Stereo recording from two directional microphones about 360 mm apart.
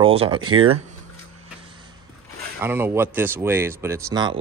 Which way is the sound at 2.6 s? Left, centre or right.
Centre.